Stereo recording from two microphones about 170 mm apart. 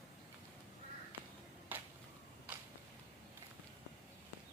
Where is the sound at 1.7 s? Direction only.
10° right (ahead or behind).